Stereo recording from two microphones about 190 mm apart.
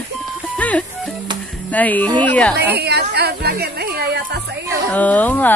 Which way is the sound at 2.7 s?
60° right (ahead or behind).